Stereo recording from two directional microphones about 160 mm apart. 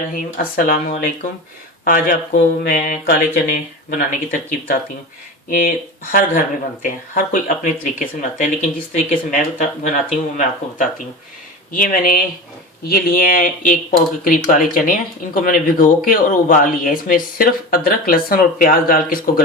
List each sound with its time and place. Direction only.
0.1 s speech: 60° left (ahead or behind)